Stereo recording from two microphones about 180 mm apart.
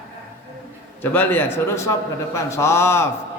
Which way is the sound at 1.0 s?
10° left (ahead or behind).